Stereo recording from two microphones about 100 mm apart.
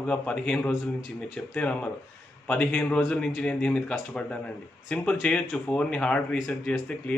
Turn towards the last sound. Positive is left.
turn(degrees=10)  # may be behind; listen again after turning